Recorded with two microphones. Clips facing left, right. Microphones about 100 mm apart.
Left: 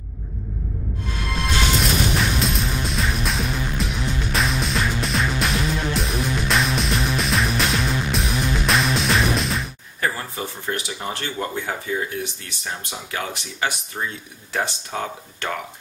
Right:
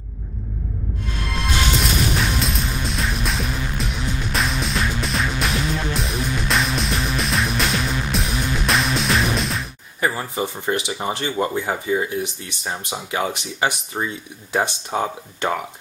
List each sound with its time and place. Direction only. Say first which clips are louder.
1.4 s music: even; centre (ahead or behind)
9.9 s speech: right 3 dB; 15° right (ahead or behind)